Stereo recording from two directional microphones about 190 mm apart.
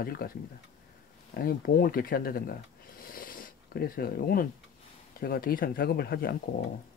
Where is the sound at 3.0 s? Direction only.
50° left (ahead or behind).